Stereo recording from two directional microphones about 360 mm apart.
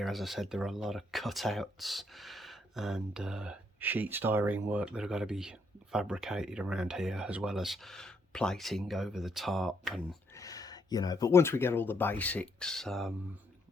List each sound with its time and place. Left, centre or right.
0.0 s speech: centre